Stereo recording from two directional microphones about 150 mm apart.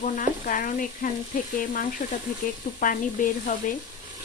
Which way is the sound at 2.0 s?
90° left.